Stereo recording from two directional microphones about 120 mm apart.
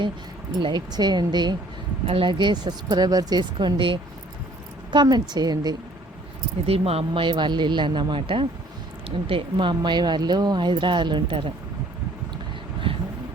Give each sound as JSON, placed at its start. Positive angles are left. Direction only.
{"t": 0.6, "sound": "speech", "side_deg": -35}
{"t": 2.0, "sound": "speech", "side_deg": -45}
{"t": 6.7, "sound": "speech", "side_deg": -55}
{"t": 12.9, "sound": "vehicle", "side_deg": -45}